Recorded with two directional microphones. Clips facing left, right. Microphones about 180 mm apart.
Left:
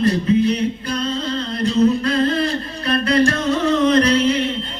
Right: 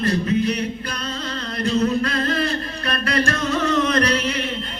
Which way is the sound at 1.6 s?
30° left (ahead or behind).